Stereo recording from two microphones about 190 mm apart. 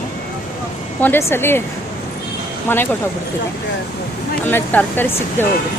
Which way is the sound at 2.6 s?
10° left (ahead or behind).